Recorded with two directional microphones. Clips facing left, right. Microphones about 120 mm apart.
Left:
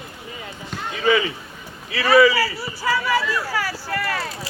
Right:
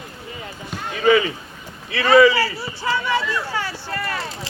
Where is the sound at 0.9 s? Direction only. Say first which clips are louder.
Right 3 dB; 40° right (ahead or behind).